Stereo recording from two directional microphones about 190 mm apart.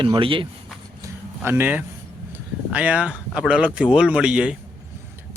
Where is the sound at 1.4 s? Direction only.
10° right (ahead or behind).